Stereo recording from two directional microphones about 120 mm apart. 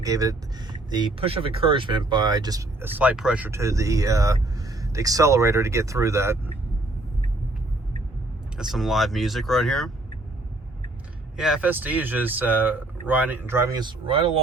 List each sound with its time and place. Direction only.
0.0 s speech: 30° right (ahead or behind)
1.2 s speech: 50° right (ahead or behind); by 2.6 s 30° right (ahead or behind)
2.8 s speech: 15° right (ahead or behind)
3.5 s speech: 25° right (ahead or behind)
8.5 s speech: centre (ahead or behind)
11.3 s speech: 5° right (ahead or behind); by 13.7 s 20° right (ahead or behind)
13.7 s speech: 40° right (ahead or behind)